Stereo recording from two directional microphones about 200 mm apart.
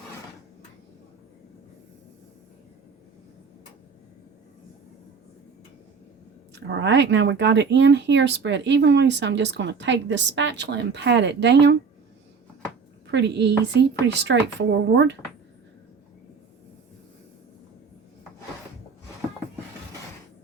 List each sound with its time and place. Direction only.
6.5 s speech: 60° right (ahead or behind)
13.1 s speech: 60° right (ahead or behind)